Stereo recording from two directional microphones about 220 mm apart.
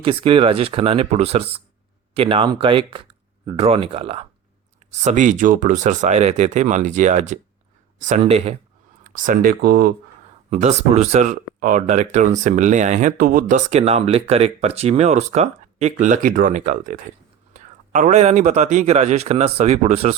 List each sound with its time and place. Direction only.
0.0 s speech: 25° right (ahead or behind); by 9.9 s 45° right (ahead or behind)
10.5 s speech: 30° right (ahead or behind)